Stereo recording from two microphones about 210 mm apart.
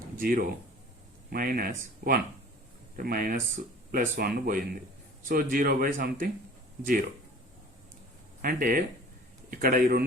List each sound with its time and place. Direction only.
0.2 s a man's voice: 45° right (ahead or behind)
8.4 s speech: 40° right (ahead or behind)